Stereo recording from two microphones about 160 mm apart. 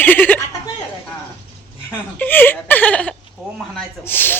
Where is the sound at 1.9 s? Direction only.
10° left (ahead or behind).